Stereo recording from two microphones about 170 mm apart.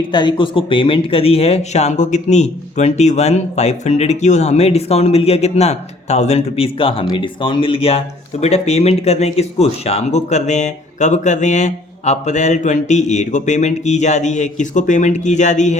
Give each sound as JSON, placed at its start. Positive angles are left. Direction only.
{"t": 0.1, "sound": "speech", "side_deg": 25}